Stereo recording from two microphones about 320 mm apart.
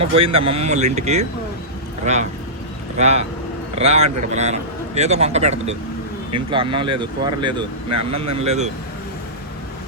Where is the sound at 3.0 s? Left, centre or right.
Centre.